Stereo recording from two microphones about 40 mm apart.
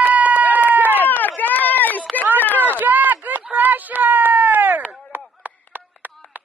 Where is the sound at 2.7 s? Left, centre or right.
Right.